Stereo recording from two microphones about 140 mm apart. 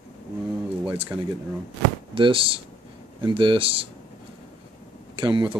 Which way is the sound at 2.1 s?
40° right (ahead or behind).